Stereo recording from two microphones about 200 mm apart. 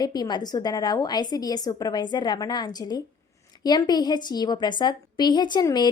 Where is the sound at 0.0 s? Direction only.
20° left (ahead or behind).